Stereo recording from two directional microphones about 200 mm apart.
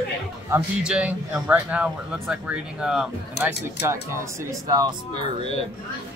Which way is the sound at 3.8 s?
15° right (ahead or behind).